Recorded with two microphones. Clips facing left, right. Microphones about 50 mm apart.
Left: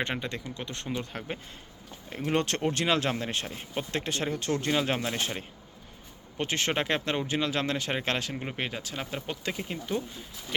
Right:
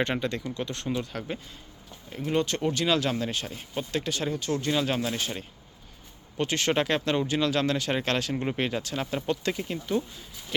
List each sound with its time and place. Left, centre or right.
0.0 s speech: centre
2.0 s speech: left
2.7 s speech: left
6.3 s speech: left
8.3 s speech: centre